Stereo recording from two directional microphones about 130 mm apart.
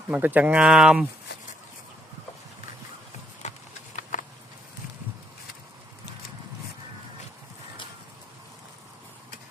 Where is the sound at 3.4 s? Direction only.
60° left (ahead or behind).